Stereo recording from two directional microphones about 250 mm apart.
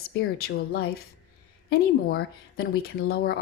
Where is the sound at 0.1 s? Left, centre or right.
Left.